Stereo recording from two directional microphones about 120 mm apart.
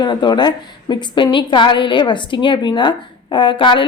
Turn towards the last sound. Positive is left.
turn(degrees=45)  # may be behind; listen again after turning